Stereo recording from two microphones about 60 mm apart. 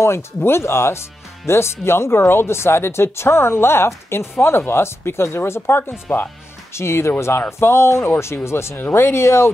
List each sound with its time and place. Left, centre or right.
0.0 s speech: left